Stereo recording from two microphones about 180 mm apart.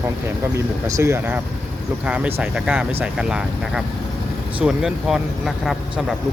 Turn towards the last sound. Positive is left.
turn(degrees=0)  # may be behind; listen again after turning